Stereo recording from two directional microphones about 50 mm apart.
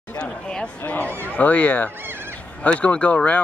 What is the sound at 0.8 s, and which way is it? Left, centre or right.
Fowl, left.